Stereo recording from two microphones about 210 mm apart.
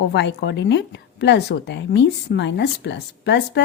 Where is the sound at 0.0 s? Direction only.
55° left (ahead or behind).